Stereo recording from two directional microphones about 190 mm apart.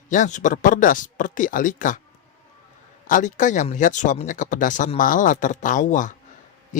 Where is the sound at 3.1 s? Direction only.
40° left (ahead or behind).